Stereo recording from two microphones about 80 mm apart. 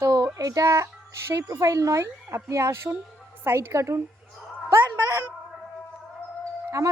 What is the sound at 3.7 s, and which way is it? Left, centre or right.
Speech, right.